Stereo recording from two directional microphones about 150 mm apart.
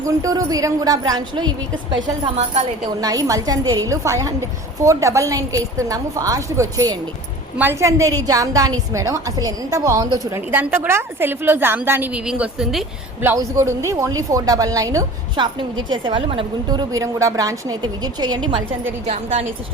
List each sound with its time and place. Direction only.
0.0 s a woman's voice: 20° right (ahead or behind)
2.2 s a woman's voice: 45° right (ahead or behind)
3.0 s a woman's voice: 25° right (ahead or behind); by 12.8 s 5° right (ahead or behind)
13.2 s a woman's voice: 20° right (ahead or behind)
15.9 s a woman's voice: 35° right (ahead or behind)
19.0 s a woman's voice: 45° right (ahead or behind)